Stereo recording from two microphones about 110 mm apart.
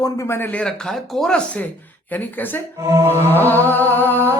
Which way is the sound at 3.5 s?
15° left (ahead or behind).